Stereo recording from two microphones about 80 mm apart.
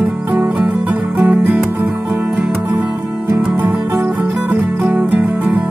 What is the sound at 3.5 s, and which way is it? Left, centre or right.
Music, centre.